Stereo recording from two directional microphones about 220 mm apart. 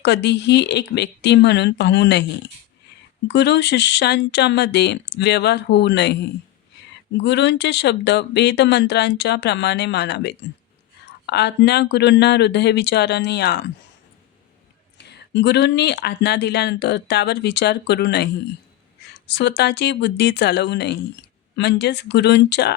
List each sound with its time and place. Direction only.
0.0 s speech: 50° left (ahead or behind)
3.2 s speech: 50° left (ahead or behind)
7.2 s speech: 50° left (ahead or behind)
14.9 s speech: 50° left (ahead or behind)
19.3 s speech: 50° left (ahead or behind)